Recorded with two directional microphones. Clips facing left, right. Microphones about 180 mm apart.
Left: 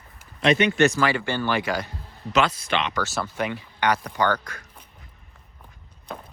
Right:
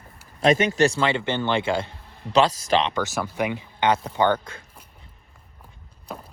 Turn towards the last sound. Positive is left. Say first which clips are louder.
# even
turn(degrees=-5)  # may be behind; listen again after turning